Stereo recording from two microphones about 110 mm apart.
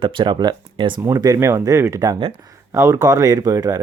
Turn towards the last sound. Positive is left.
turn(degrees=-30)  # may be behind; listen again after turning